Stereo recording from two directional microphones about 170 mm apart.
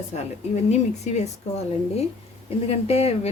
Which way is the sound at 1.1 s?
45° left (ahead or behind).